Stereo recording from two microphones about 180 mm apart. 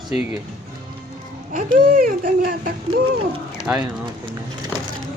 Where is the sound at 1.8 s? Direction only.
50° right (ahead or behind).